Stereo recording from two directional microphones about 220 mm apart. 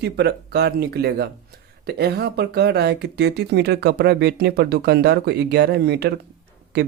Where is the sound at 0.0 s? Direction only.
50° right (ahead or behind).